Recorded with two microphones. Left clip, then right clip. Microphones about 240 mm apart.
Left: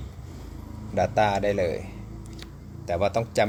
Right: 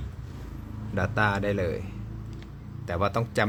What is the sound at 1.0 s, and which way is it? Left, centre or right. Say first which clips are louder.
Speech: left 4 dB; centre.